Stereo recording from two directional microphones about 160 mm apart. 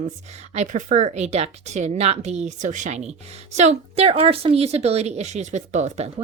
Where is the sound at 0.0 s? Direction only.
45° right (ahead or behind).